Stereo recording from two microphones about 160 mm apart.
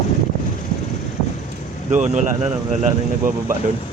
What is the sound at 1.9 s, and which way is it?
Speech, 45° right (ahead or behind).